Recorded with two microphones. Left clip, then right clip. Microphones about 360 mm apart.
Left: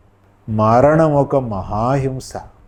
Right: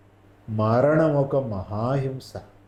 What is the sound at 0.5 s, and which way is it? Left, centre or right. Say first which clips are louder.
A man's voice: left 8 dB; left.